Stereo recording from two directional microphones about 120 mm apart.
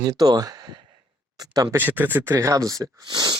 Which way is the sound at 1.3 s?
30° right (ahead or behind).